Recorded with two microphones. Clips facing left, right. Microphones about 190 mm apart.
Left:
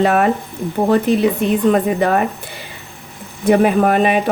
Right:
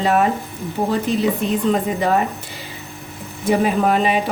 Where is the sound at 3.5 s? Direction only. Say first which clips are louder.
Left 4 dB; 60° left (ahead or behind).